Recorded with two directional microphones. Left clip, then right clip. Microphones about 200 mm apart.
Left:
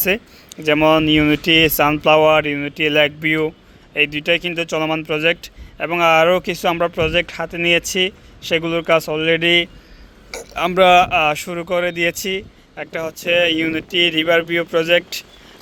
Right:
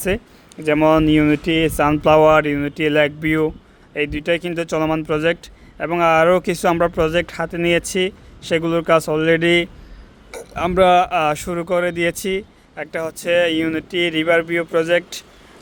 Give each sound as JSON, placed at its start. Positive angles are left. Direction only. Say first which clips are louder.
{"t": 0.0, "sound": "speech", "louder": "left 3 dB", "side_deg": -10}